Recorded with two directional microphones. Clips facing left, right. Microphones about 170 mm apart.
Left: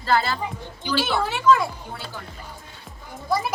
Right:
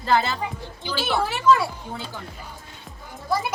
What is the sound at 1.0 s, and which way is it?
Speech, 5° right (ahead or behind).